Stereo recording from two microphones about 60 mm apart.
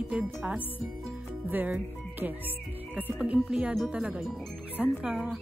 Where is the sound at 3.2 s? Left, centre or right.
Centre.